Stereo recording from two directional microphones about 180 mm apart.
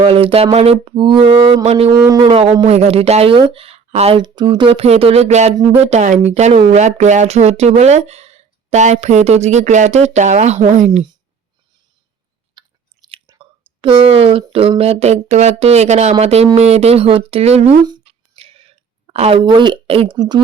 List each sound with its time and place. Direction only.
0.0 s mantra: 30° right (ahead or behind)
1.9 s mantra: 20° right (ahead or behind)
2.3 s speech: 35° right (ahead or behind)
12.6 s chewing: 25° right (ahead or behind)
13.1 s speech: 25° right (ahead or behind)
18.0 s a sound: 35° right (ahead or behind)